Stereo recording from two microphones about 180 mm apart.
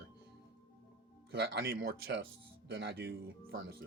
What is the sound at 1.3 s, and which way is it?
Speech, 70° right (ahead or behind).